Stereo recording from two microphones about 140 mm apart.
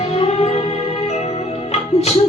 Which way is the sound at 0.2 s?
50° left (ahead or behind).